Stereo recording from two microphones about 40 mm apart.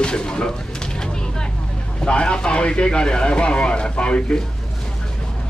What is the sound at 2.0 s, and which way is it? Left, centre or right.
Speech, left.